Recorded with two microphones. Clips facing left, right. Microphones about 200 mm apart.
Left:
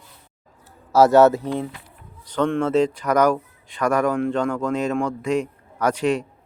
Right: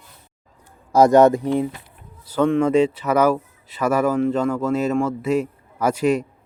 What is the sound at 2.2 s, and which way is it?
Speech, 5° right (ahead or behind).